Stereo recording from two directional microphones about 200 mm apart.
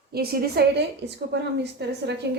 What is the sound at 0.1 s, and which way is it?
A woman's voice, 50° right (ahead or behind).